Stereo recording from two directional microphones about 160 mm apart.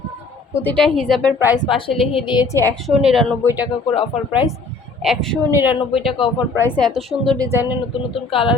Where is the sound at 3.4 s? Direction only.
10° right (ahead or behind).